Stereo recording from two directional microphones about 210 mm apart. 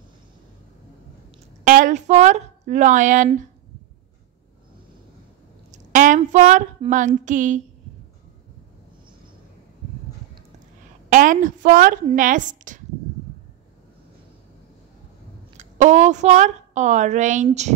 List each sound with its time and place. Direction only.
1.6 s speech: 35° right (ahead or behind)
5.7 s a sound: 40° right (ahead or behind)
11.1 s speech: 40° right (ahead or behind)
15.5 s a woman's voice: 35° right (ahead or behind)